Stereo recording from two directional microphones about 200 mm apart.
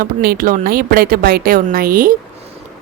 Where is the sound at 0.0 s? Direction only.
50° right (ahead or behind).